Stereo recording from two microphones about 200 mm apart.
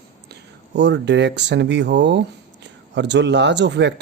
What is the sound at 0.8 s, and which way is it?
Speech, 60° right (ahead or behind).